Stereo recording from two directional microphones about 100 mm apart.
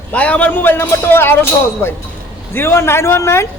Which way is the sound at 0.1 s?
15° left (ahead or behind).